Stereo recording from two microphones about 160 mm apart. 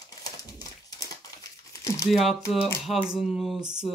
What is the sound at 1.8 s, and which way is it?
Crumpling, 20° left (ahead or behind).